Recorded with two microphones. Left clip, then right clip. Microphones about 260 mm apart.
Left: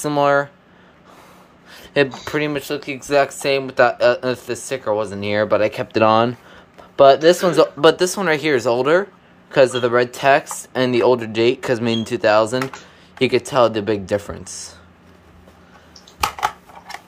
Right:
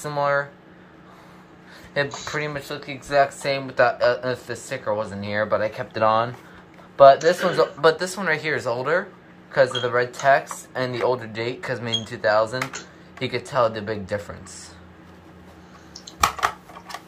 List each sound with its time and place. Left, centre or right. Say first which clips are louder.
0.0 s speech: left 6 dB; left
1.7 s speech: left 7 dB; left